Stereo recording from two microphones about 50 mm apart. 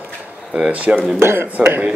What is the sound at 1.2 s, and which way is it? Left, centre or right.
Speech, right.